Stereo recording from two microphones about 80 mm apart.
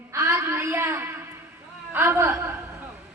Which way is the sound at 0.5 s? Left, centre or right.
Right.